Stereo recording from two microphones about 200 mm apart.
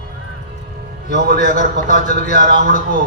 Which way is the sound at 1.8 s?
40° left (ahead or behind).